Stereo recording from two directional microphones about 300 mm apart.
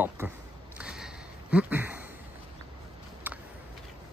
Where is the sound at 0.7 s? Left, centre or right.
Centre.